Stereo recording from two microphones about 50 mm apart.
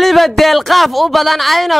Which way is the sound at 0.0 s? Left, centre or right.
Centre.